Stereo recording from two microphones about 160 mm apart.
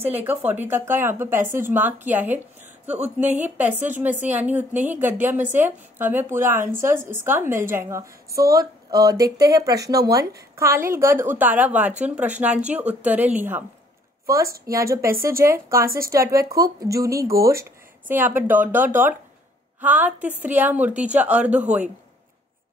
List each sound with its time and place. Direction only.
0.0 s a woman's voice: 10° right (ahead or behind)